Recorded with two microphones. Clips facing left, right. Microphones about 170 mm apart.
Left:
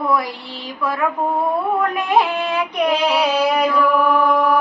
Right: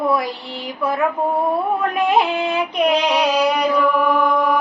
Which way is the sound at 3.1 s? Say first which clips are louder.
Even; 5° left (ahead or behind).